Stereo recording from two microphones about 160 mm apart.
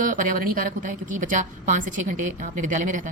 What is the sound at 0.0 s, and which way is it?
Speech, 55° right (ahead or behind).